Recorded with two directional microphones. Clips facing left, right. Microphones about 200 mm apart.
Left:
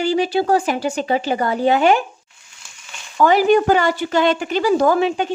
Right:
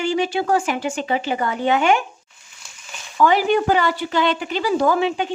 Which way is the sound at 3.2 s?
40° left (ahead or behind).